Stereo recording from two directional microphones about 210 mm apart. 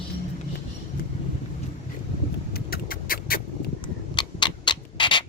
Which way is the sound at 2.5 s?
45° left (ahead or behind).